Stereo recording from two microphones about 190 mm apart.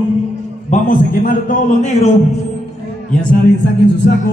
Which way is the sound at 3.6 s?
65° left (ahead or behind).